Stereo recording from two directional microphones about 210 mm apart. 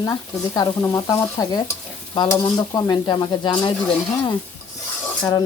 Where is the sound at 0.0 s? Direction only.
15° left (ahead or behind).